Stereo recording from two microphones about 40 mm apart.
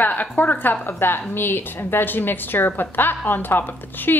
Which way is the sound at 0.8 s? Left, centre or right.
Left.